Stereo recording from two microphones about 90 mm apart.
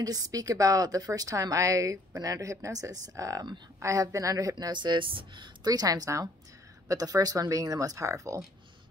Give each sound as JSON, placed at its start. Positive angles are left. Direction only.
{"t": 0.0, "sound": "a woman's voice", "side_deg": -45}